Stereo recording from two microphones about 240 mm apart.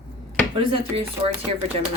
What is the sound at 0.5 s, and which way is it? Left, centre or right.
Speech, right.